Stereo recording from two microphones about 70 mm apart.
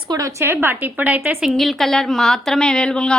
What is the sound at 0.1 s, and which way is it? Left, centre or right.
Speech, right.